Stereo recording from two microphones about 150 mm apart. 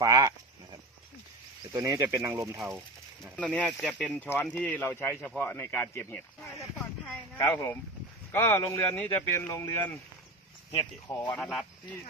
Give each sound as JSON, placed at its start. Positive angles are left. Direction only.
{"t": 0.0, "sound": "speech", "side_deg": -25}
{"t": 1.7, "sound": "speech", "side_deg": -20}
{"t": 3.3, "sound": "a man's voice", "side_deg": 10}
{"t": 7.1, "sound": "a sound", "side_deg": 15}
{"t": 8.3, "sound": "a man's voice", "side_deg": 20}
{"t": 11.3, "sound": "speech", "side_deg": 5}